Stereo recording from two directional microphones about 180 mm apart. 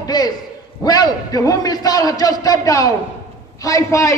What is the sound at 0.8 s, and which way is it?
A man's voice, 20° left (ahead or behind).